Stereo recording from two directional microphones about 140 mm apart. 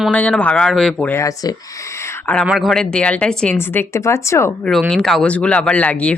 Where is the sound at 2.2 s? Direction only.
10° left (ahead or behind).